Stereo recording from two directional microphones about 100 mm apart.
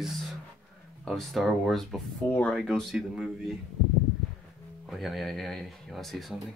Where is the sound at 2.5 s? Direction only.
Centre (ahead or behind).